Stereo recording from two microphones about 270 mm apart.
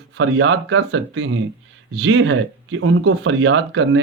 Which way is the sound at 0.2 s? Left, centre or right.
Right.